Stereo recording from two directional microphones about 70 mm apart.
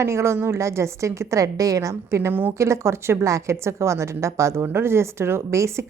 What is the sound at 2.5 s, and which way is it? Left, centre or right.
Speech, right.